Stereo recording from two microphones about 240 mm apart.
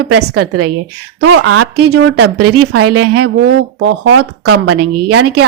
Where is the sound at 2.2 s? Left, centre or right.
Right.